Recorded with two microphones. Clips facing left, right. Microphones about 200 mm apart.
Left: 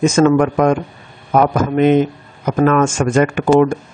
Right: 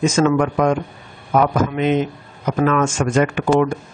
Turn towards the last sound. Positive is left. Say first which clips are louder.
# left 4 dB
turn(degrees=50)  # may be behind; listen again after turning